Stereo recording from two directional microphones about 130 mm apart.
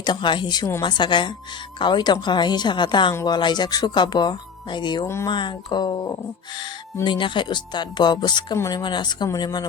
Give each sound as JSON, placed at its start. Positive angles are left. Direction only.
{"t": 0.0, "sound": "speech", "side_deg": 35}
{"t": 5.0, "sound": "speech", "side_deg": 20}
{"t": 5.3, "sound": "speech", "side_deg": 35}